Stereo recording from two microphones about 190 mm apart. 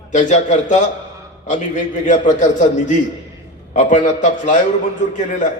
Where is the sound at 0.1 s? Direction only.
40° left (ahead or behind).